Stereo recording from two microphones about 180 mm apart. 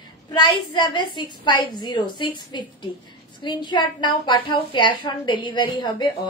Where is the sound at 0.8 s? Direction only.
25° left (ahead or behind).